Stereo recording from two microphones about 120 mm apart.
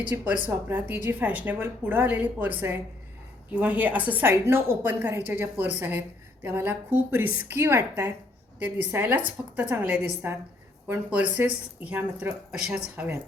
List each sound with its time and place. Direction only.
0.1 s a woman's voice: 20° right (ahead or behind)